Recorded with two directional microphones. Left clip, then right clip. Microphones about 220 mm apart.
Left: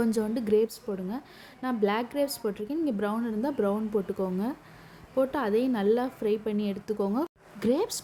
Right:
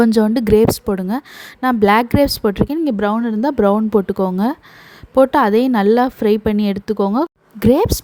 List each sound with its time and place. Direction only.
0.0 s a woman's voice: 40° right (ahead or behind)